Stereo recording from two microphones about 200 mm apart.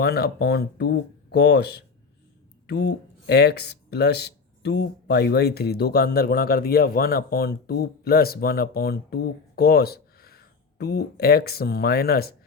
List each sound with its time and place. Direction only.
0.0 s speech: 55° left (ahead or behind)